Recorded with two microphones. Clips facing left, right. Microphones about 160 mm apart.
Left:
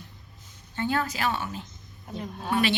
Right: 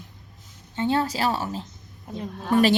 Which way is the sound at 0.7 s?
25° right (ahead or behind).